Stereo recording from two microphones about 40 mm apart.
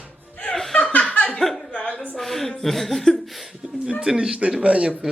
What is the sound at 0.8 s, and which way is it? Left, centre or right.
Laughter, left.